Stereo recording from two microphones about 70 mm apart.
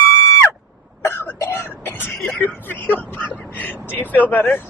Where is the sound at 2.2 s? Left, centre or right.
Left.